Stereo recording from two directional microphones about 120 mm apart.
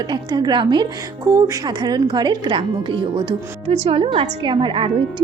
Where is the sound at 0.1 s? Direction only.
35° right (ahead or behind).